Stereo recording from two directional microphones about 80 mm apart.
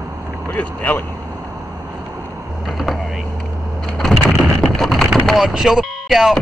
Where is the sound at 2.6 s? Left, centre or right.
Centre.